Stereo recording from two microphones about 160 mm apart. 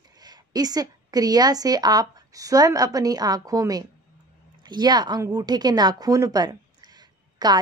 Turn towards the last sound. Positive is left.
turn(degrees=-25)  # may be behind; listen again after turning